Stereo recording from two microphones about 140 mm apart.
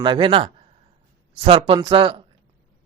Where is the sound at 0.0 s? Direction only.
35° right (ahead or behind).